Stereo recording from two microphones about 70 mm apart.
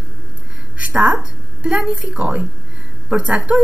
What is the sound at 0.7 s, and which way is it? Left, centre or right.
A woman's voice, centre.